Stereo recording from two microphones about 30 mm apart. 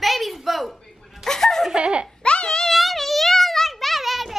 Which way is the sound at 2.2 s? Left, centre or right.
Left.